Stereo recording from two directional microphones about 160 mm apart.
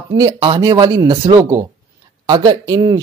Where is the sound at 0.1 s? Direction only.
25° right (ahead or behind).